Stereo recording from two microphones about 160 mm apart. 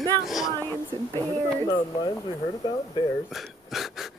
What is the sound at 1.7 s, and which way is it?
Speech, 30° left (ahead or behind).